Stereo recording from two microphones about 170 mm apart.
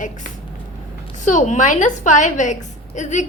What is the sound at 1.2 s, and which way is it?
A woman's voice, 45° left (ahead or behind).